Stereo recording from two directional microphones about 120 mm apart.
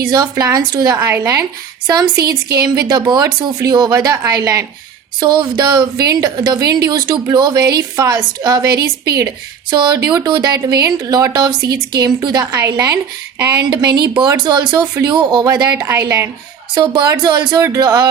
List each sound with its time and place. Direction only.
0.0 s a woman's voice: 35° right (ahead or behind)
0.9 s a woman's voice: 20° right (ahead or behind)
13.7 s a woman's voice: 35° right (ahead or behind)
15.9 s a woman's voice: 20° right (ahead or behind)
16.7 s a woman's voice: 35° right (ahead or behind)